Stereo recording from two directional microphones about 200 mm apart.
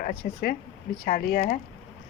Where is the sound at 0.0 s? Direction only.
50° left (ahead or behind).